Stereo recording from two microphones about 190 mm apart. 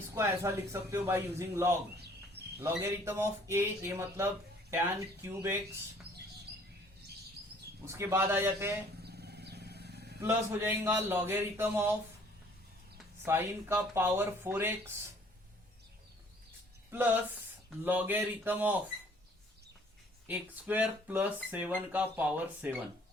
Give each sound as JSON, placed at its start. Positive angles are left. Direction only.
{"t": 0.1, "sound": "speech", "side_deg": -15}
{"t": 7.9, "sound": "speech", "side_deg": -15}
{"t": 9.0, "sound": "vehicle", "side_deg": -60}
{"t": 10.2, "sound": "speech", "side_deg": -10}
{"t": 13.2, "sound": "speech", "side_deg": -15}
{"t": 17.8, "sound": "speech", "side_deg": -10}
{"t": 20.2, "sound": "speech", "side_deg": -10}